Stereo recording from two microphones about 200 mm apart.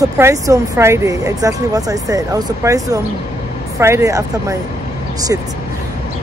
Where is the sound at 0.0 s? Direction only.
15° right (ahead or behind).